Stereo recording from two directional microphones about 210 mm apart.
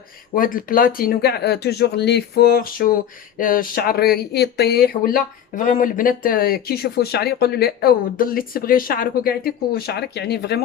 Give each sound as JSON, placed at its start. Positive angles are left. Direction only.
{"t": 0.3, "sound": "speech", "side_deg": 40}